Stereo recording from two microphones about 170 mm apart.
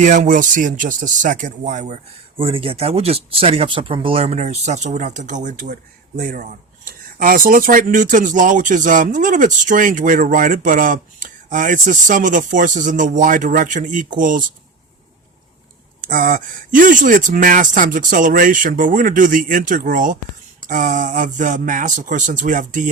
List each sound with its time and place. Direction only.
0.0 s speech: 50° right (ahead or behind)
2.4 s speech: 30° right (ahead or behind)
6.1 s speech: 60° right (ahead or behind)
16.0 s speech: 55° right (ahead or behind)